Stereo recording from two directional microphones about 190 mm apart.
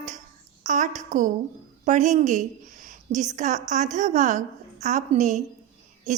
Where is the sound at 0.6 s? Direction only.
40° right (ahead or behind).